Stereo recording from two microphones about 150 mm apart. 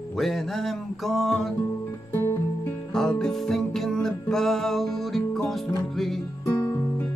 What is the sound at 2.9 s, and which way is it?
Music, 5° left (ahead or behind).